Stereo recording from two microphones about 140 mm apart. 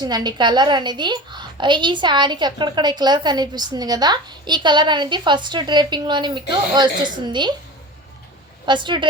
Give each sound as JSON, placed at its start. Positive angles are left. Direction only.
{"t": 0.0, "sound": "a woman's voice", "side_deg": -30}
{"t": 8.6, "sound": "a woman's voice", "side_deg": -35}